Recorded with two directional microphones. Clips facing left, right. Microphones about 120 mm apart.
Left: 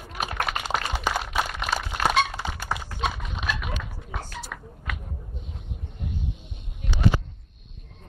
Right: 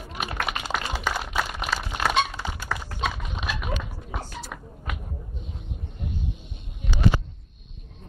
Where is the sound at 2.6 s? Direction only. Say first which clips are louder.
Even; 20° left (ahead or behind).